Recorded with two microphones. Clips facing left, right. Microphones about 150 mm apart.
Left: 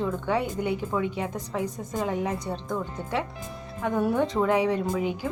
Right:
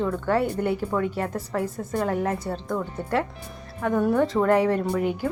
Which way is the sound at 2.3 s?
5° right (ahead or behind).